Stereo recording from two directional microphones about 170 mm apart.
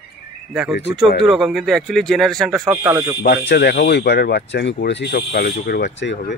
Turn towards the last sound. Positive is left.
turn(degrees=90)